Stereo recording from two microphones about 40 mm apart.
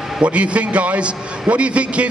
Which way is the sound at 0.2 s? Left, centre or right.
Right.